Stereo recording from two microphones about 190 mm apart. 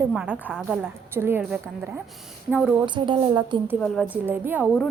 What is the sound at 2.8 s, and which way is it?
Speech, 25° right (ahead or behind).